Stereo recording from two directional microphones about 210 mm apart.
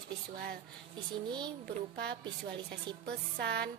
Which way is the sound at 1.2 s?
20° right (ahead or behind).